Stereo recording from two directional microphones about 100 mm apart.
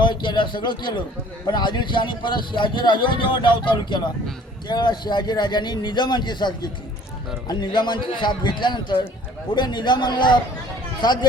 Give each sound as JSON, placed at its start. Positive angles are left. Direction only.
{"t": 0.0, "sound": "speech", "side_deg": 50}